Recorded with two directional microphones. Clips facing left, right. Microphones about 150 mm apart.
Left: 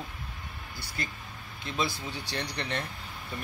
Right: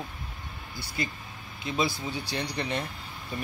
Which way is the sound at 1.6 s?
10° right (ahead or behind).